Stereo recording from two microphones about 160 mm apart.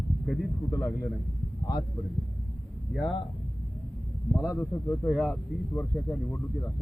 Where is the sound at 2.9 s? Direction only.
Centre (ahead or behind).